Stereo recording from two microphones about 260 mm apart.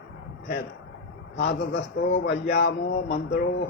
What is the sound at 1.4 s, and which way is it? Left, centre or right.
Mantra, left.